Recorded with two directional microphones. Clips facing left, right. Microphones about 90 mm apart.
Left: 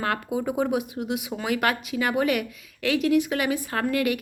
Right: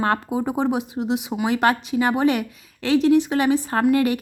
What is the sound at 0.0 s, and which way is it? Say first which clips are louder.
A woman's voice: right 4 dB; 30° right (ahead or behind).